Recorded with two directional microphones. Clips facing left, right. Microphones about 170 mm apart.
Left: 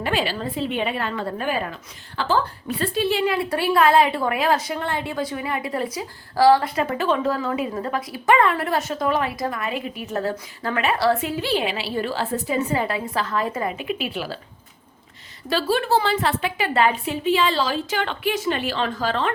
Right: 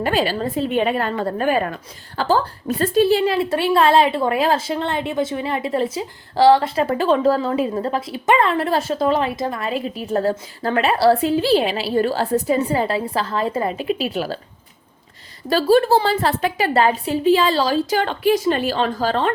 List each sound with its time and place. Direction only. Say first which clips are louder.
0.0 s a woman's voice: right 4 dB; 40° right (ahead or behind)
3.3 s a woman's voice: right 3 dB; 25° right (ahead or behind); by 14.3 s 40° right (ahead or behind)
15.4 s a woman's voice: right 7 dB; 40° right (ahead or behind)